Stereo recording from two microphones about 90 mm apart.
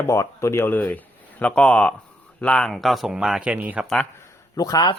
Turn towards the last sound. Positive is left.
turn(degrees=45)  # may be behind; listen again after turning